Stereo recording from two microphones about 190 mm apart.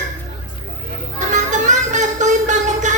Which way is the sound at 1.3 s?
40° right (ahead or behind).